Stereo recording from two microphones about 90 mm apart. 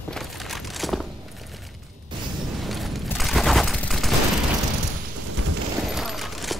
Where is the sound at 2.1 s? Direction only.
60° right (ahead or behind).